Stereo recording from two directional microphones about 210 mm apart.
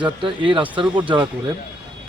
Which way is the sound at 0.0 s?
25° right (ahead or behind).